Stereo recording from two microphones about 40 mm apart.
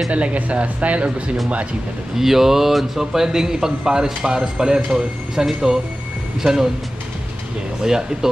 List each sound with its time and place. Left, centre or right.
0.1 s speech: right
2.1 s speech: centre
7.8 s speech: centre